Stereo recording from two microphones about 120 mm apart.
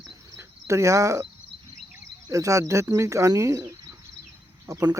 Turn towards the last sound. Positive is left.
turn(degrees=-30)  # may be behind; listen again after turning